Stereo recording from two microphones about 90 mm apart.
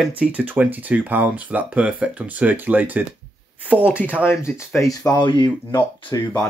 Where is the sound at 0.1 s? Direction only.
15° right (ahead or behind).